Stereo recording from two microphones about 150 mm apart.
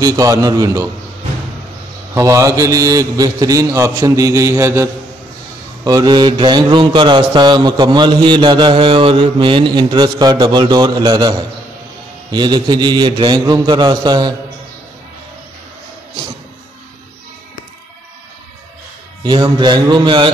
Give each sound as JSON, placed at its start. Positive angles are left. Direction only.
{"t": 0.0, "sound": "a man's voice", "side_deg": -25}
{"t": 2.1, "sound": "a man's voice", "side_deg": -20}
{"t": 5.9, "sound": "a man's voice", "side_deg": -25}
{"t": 19.2, "sound": "a man's voice", "side_deg": -30}